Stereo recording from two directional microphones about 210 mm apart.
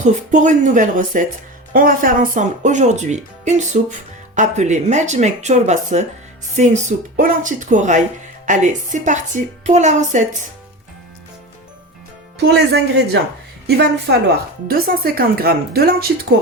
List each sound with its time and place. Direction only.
0.0 s speech: 35° right (ahead or behind)
12.4 s a woman's voice: 55° right (ahead or behind)